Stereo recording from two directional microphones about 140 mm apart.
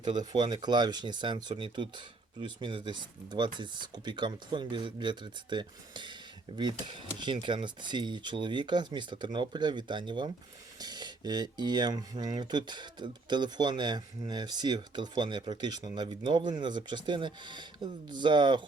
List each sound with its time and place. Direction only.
0.0 s speech: 30° right (ahead or behind)